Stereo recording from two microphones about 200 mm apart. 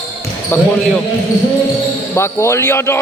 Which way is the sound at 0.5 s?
10° left (ahead or behind).